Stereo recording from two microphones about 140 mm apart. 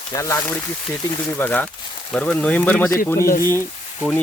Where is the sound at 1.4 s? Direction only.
10° left (ahead or behind).